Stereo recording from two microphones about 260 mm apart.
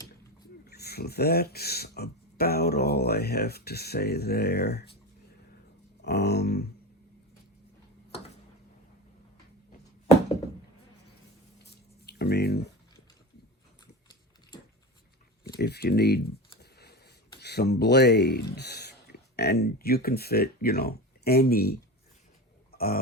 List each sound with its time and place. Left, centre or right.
0.6 s speech: left
6.0 s speech: left
11.6 s a sound: left
15.4 s typing: left
17.4 s speech: left
22.7 s burping: left